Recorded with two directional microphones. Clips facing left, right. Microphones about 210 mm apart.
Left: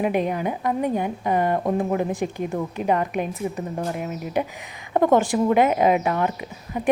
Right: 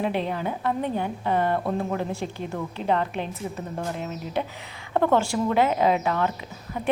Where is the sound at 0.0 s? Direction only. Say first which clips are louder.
Left 4 dB; 15° left (ahead or behind).